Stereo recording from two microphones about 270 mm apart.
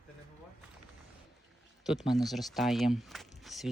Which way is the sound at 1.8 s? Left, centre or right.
Centre.